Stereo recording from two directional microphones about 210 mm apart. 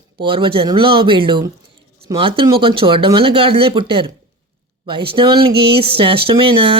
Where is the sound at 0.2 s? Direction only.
25° right (ahead or behind).